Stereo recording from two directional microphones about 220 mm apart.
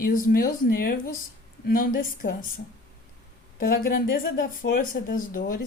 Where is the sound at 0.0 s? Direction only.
40° left (ahead or behind).